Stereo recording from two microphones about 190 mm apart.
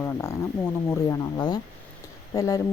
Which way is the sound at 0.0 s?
10° left (ahead or behind).